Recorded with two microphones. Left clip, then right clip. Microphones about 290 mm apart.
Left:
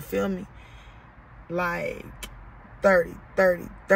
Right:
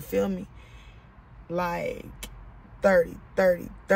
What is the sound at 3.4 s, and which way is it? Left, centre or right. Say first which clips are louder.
Speech: left 1 dB; centre.